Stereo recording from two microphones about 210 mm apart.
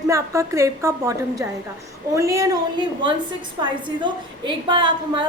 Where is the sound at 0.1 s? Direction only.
15° right (ahead or behind).